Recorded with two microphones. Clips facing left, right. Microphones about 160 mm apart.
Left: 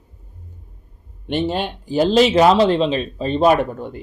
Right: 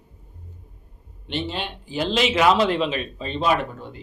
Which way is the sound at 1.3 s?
50° left (ahead or behind).